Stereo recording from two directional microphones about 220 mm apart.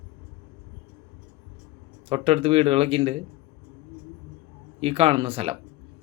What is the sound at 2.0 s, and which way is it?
Speech, 25° right (ahead or behind).